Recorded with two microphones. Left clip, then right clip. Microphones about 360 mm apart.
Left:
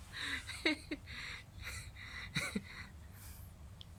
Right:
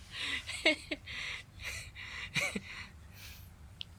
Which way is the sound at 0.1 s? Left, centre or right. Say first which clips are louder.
Right 4 dB; centre.